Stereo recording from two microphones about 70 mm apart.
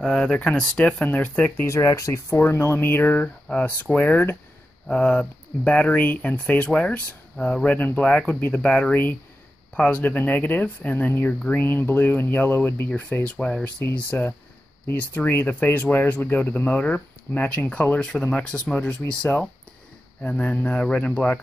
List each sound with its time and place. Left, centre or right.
0.0 s speech: centre
0.3 s speech: centre
1.7 s speech: left
4.8 s speech: centre
20.2 s speech: centre